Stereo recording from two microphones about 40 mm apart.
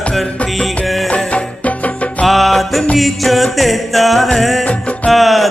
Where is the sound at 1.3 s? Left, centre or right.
Left.